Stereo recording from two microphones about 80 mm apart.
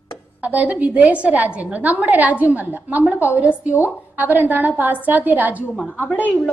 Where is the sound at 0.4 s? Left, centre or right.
Centre.